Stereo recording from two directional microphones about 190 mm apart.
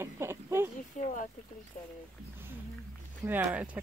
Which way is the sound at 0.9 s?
40° left (ahead or behind).